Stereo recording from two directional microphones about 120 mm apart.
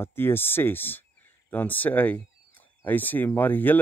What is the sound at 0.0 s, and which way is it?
Speech, 20° left (ahead or behind).